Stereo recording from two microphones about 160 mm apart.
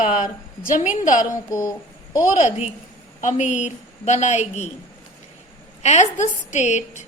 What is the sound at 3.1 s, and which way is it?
A woman's voice, 50° left (ahead or behind).